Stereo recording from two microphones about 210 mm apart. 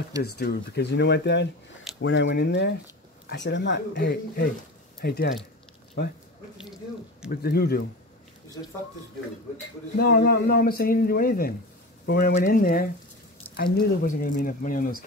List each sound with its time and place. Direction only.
0.2 s speech: 50° left (ahead or behind)
7.2 s speech: 50° left (ahead or behind)
9.9 s speech: 50° left (ahead or behind)